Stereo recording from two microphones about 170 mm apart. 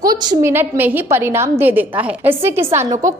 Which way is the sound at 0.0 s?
20° right (ahead or behind).